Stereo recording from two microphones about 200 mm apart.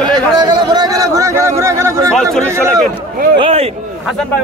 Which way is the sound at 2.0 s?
Centre (ahead or behind).